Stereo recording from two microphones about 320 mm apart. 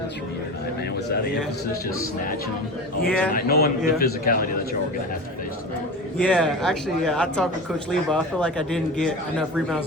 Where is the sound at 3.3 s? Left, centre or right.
Left.